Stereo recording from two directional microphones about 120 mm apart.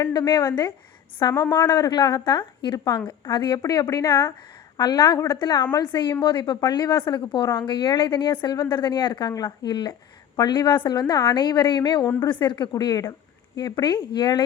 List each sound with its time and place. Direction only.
0.0 s a woman's voice: 35° left (ahead or behind)